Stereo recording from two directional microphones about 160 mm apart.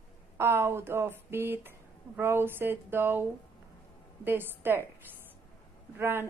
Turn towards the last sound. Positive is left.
turn(degrees=-15)  # may be behind; listen again after turning